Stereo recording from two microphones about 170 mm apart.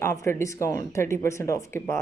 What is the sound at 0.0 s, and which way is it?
Speech, 15° left (ahead or behind).